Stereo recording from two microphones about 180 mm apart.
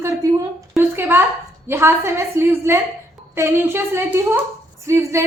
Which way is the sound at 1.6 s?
15° right (ahead or behind).